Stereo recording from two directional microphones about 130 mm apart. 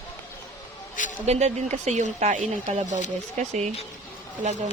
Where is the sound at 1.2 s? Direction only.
60° right (ahead or behind).